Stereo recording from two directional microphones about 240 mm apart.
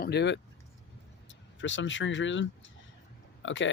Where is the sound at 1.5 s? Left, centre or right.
Left.